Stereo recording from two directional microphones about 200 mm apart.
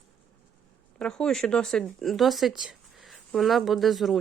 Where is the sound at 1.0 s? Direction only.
5° left (ahead or behind).